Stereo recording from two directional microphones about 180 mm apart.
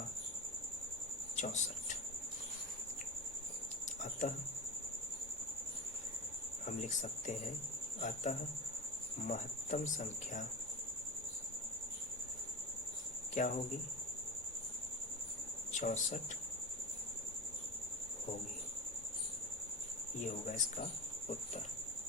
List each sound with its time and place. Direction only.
1.4 s a sound: 40° left (ahead or behind)
4.0 s a sound: 45° left (ahead or behind)
6.7 s speech: 40° left (ahead or behind)
13.4 s speech: 45° left (ahead or behind)
15.7 s speech: 45° left (ahead or behind)
20.2 s speech: 40° left (ahead or behind)